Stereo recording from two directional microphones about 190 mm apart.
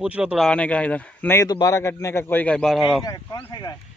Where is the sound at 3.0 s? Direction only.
20° left (ahead or behind).